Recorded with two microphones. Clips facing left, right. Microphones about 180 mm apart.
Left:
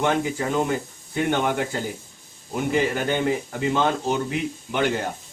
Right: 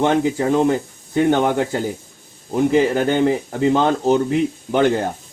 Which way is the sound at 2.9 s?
40° right (ahead or behind).